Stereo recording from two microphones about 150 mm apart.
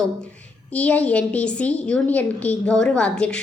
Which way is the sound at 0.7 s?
10° left (ahead or behind).